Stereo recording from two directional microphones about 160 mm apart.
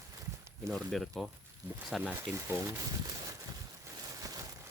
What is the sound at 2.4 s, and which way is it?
Speech, 15° right (ahead or behind).